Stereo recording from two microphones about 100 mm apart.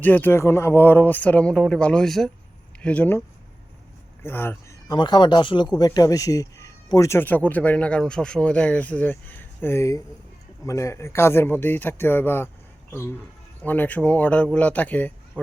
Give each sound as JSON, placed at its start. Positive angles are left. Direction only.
{"t": 0.0, "sound": "speech", "side_deg": 20}
{"t": 2.8, "sound": "speech", "side_deg": 15}
{"t": 4.2, "sound": "a sound", "side_deg": 25}
{"t": 4.9, "sound": "speech", "side_deg": 50}
{"t": 7.1, "sound": "speech", "side_deg": 20}